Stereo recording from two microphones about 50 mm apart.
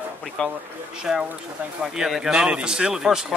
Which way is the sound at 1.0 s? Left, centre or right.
Centre.